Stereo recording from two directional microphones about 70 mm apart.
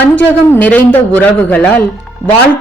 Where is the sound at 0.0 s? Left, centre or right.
Left.